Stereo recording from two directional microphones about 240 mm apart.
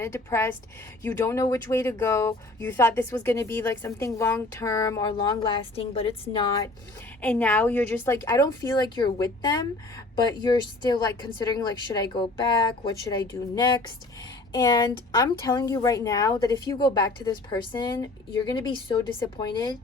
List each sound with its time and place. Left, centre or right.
0.0 s speech: centre
7.2 s speech: centre
14.5 s speech: centre